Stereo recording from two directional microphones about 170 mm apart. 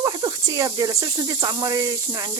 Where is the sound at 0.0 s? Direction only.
25° right (ahead or behind).